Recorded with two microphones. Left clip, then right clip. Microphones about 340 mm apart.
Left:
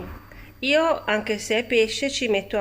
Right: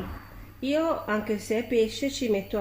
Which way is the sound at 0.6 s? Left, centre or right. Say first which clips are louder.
Left 6 dB; left.